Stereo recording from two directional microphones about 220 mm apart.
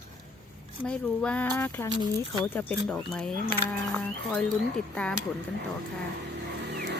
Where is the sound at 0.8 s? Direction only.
5° left (ahead or behind).